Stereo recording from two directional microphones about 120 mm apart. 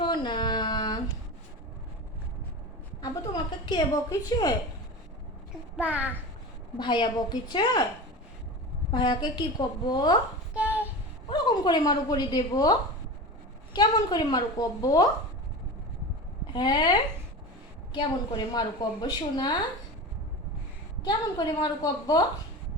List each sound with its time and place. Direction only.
0.0 s a sound: 40° left (ahead or behind)
3.0 s a sound: 35° left (ahead or behind)
5.7 s a child's voice: 10° right (ahead or behind)
6.7 s a woman's voice: 40° left (ahead or behind)
8.9 s a woman's voice: 40° left (ahead or behind)
10.5 s child singing: 15° right (ahead or behind)
11.3 s speech: 40° left (ahead or behind)
13.7 s a woman's voice: 35° left (ahead or behind)
16.5 s a woman's voice: 35° left (ahead or behind)
21.0 s a woman's voice: 35° left (ahead or behind)